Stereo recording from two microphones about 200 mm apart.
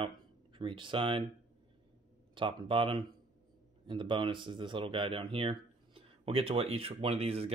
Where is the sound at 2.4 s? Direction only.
25° right (ahead or behind).